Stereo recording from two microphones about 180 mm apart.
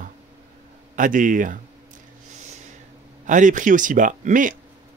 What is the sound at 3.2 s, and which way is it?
Speech, 45° right (ahead or behind).